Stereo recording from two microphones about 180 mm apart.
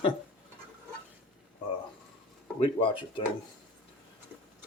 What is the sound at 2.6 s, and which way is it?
Speech, 30° left (ahead or behind).